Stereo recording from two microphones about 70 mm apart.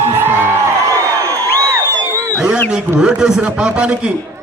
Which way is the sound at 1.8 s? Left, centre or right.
Right.